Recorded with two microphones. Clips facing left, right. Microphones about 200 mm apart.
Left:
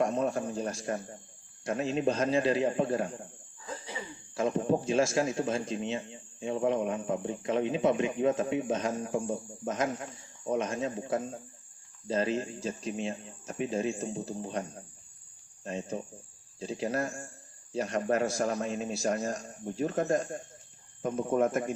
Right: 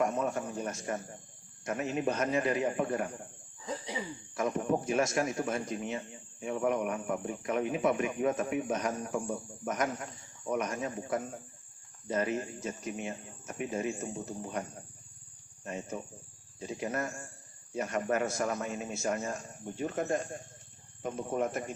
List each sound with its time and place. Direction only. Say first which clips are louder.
0.0 s a man's voice: left 2 dB; 30° left (ahead or behind)
3.7 s cough: right 3 dB; 15° right (ahead or behind)
4.4 s speech: left 3 dB; 30° left (ahead or behind)
15.6 s a man's voice: left 3 dB; 30° left (ahead or behind); by 21.8 s 45° left (ahead or behind)